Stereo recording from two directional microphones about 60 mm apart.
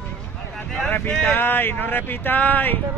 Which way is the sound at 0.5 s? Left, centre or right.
Left.